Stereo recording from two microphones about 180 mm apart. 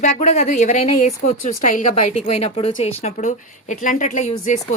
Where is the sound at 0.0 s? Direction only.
40° left (ahead or behind).